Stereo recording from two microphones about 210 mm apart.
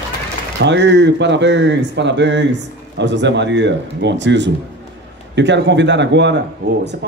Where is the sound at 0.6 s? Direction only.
55° right (ahead or behind).